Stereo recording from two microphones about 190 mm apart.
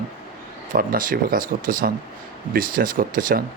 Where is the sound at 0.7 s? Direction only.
50° right (ahead or behind).